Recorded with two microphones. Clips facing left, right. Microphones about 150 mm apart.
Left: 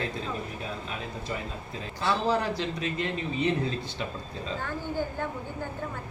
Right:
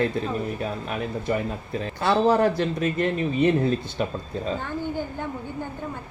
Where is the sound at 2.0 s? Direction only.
55° right (ahead or behind).